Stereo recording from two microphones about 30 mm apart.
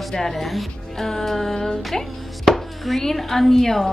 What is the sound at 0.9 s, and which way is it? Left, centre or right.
A woman's voice, centre.